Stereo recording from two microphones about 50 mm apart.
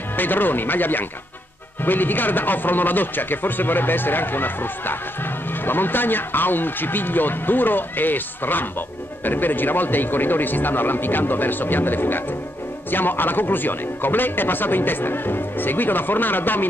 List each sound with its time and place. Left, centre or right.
0.1 s speech: left